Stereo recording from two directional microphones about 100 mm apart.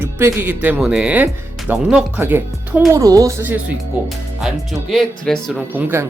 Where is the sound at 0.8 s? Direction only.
10° right (ahead or behind).